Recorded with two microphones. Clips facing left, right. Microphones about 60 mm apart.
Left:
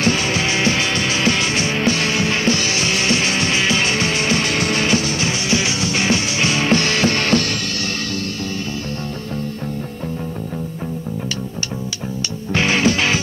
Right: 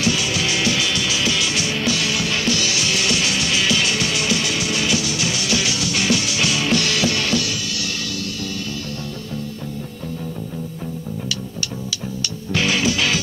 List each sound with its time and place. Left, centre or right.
0.0 s music: left
12.5 s music: left